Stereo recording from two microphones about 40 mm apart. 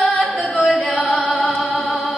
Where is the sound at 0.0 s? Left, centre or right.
Left.